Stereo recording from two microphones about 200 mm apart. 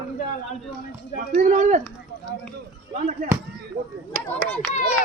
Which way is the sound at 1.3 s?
40° right (ahead or behind).